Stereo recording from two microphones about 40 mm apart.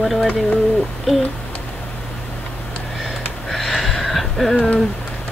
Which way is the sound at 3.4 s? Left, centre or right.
Centre.